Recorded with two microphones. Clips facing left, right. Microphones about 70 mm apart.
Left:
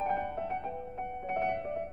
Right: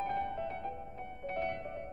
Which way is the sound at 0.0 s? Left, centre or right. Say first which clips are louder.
Left 3 dB; centre.